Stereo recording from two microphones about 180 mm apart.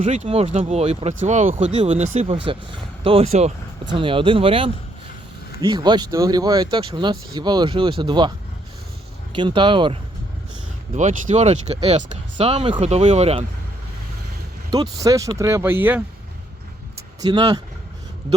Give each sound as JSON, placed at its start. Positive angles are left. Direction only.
{"t": 0.0, "sound": "speech", "side_deg": -35}
{"t": 9.3, "sound": "speech", "side_deg": -25}
{"t": 10.9, "sound": "speech", "side_deg": -40}
{"t": 14.7, "sound": "speech", "side_deg": -20}
{"t": 17.2, "sound": "speech", "side_deg": -25}